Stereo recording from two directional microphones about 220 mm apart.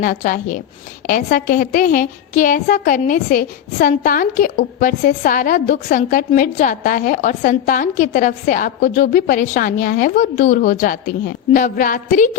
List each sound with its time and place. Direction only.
0.0 s a woman's voice: 40° left (ahead or behind)